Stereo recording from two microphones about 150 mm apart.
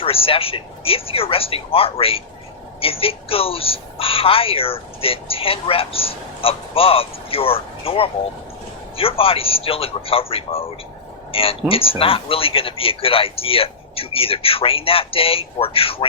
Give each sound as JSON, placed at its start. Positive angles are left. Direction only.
{"t": 0.0, "sound": "speech", "side_deg": 40}